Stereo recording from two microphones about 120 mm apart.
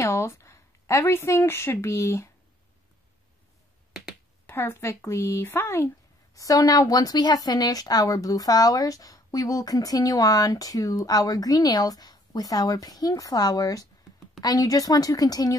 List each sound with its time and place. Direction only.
0.0 s speech: 25° left (ahead or behind)
4.5 s a woman's voice: 20° left (ahead or behind)